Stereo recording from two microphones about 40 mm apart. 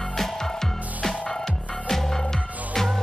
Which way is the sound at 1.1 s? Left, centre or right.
Left.